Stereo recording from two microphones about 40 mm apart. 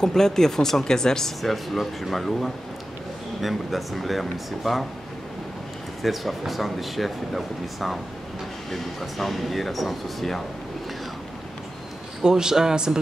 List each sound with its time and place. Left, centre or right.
0.0 s speech: centre
1.4 s speech: centre
6.0 s speech: centre
12.2 s a man's voice: centre